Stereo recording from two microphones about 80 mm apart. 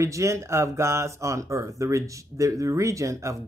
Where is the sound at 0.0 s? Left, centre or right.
Right.